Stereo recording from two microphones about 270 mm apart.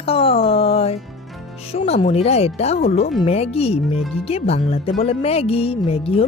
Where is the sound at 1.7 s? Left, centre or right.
Centre.